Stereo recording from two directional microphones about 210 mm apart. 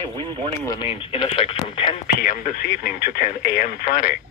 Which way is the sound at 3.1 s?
40° left (ahead or behind).